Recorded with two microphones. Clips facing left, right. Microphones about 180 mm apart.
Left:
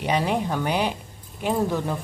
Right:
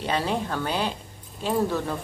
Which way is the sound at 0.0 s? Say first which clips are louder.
Left 3 dB; 15° left (ahead or behind).